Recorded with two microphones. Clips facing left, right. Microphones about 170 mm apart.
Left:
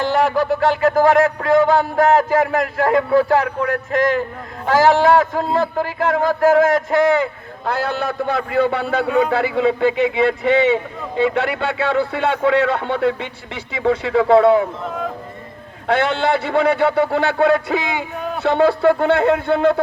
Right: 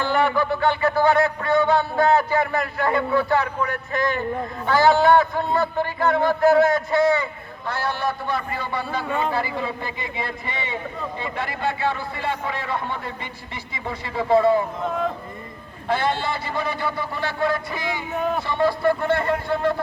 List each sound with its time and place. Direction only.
0.3 s a sound: 90° left
7.6 s a man's voice: 80° left
15.9 s a man's voice: 75° left (ahead or behind)